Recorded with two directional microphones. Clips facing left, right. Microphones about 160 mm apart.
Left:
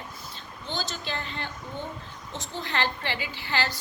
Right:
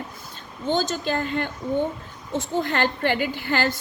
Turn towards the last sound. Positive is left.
turn(degrees=-50)  # may be behind; listen again after turning